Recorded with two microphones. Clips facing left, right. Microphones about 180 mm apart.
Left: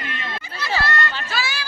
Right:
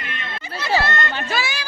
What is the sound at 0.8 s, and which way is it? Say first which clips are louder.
Chatter: right 1 dB; 20° right (ahead or behind).